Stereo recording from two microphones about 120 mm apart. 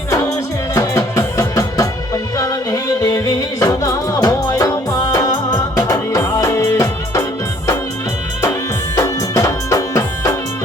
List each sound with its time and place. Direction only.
0.1 s music: 30° left (ahead or behind)
9.0 s music: 25° left (ahead or behind)